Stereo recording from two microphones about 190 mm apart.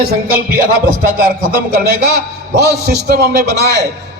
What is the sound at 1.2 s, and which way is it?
A man's voice, 50° right (ahead or behind).